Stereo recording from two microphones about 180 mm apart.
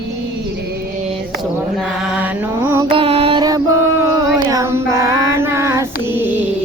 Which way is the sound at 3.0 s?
30° right (ahead or behind).